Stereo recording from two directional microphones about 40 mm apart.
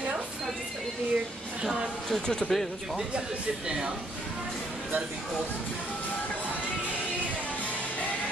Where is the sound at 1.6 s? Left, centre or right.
Centre.